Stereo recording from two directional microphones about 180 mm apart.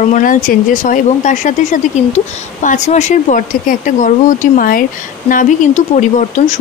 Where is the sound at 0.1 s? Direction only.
50° left (ahead or behind).